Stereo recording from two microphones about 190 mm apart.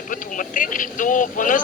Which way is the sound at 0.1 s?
45° left (ahead or behind).